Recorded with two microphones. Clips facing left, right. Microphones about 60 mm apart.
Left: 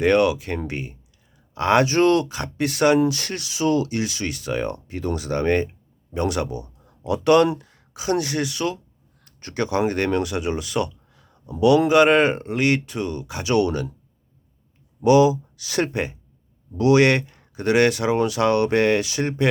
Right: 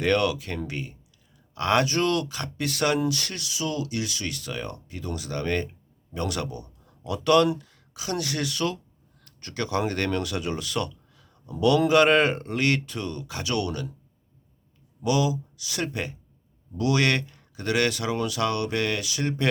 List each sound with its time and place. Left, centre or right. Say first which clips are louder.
0.0 s speech: left 6 dB; centre
8.4 s speech: left 2 dB; centre
13.5 s speech: left 8 dB; left
15.0 s speech: left 9 dB; left
15.5 s speech: left 7 dB; left
16.7 s speech: left 7 dB; left